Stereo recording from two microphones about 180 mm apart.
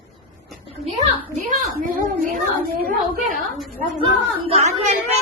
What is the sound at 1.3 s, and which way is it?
Speech, 45° right (ahead or behind).